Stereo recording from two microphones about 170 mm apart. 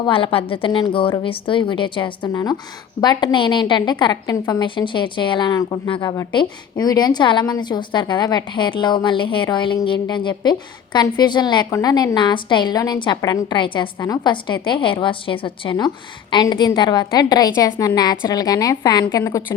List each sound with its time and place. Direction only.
0.0 s a woman's voice: 30° left (ahead or behind)